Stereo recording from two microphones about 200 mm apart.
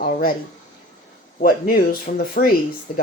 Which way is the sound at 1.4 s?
45° left (ahead or behind).